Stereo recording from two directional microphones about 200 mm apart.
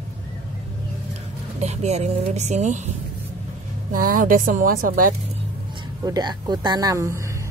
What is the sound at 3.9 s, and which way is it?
A woman's voice, 45° right (ahead or behind).